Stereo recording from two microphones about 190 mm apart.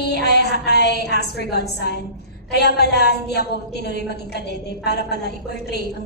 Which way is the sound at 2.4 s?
60° left (ahead or behind).